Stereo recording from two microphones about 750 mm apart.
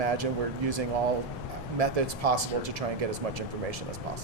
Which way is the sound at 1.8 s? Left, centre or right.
Right.